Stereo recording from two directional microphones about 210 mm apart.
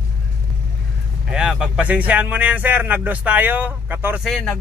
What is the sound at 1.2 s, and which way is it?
Speech, 5° right (ahead or behind).